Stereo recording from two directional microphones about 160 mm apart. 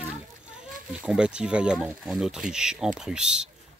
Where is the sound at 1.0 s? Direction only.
5° right (ahead or behind).